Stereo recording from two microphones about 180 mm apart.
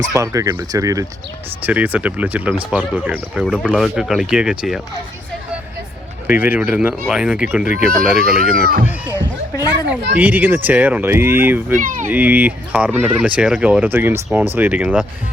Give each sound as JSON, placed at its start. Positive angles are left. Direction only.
{"t": 0.1, "sound": "speech", "side_deg": -15}
{"t": 6.2, "sound": "speech", "side_deg": -10}
{"t": 11.8, "sound": "speech", "side_deg": -45}
{"t": 12.0, "sound": "speech", "side_deg": -10}